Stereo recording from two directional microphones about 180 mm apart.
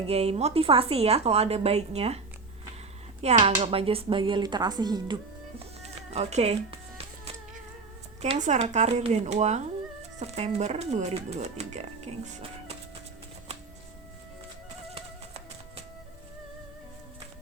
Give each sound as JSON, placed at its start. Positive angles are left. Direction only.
{"t": 0.1, "sound": "speech", "side_deg": -35}
{"t": 5.8, "sound": "speech", "side_deg": -35}
{"t": 8.2, "sound": "speech", "side_deg": -40}
{"t": 14.9, "sound": "music", "side_deg": -35}